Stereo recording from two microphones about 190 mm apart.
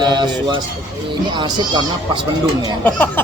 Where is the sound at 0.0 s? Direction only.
25° right (ahead or behind).